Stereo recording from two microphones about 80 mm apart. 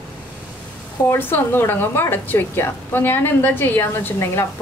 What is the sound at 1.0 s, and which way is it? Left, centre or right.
A woman's voice, left.